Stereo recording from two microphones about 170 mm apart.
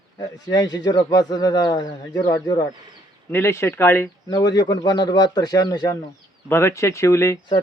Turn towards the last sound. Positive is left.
turn(degrees=15)  # may be behind; listen again after turning